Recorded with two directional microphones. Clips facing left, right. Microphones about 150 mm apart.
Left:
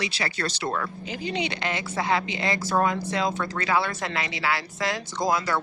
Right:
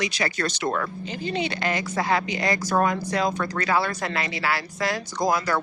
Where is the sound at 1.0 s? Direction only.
10° left (ahead or behind).